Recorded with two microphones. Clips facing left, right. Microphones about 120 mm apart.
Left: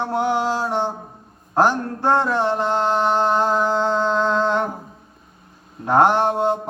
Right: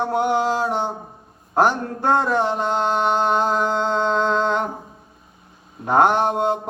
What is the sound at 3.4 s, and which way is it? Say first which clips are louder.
Mantra: left 1 dB; 5° left (ahead or behind).